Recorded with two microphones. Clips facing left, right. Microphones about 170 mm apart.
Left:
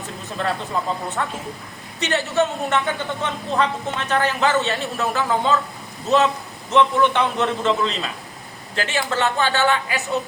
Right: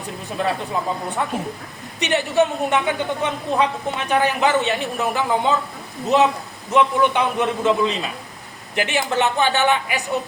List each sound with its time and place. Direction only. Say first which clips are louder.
0.4 s a woman's voice: right 1 dB; 15° right (ahead or behind)